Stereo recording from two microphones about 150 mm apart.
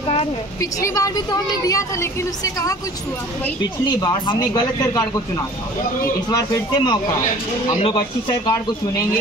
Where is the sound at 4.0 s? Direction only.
30° left (ahead or behind).